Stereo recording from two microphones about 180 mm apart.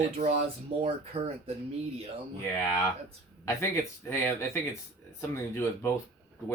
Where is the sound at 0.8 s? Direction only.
35° right (ahead or behind).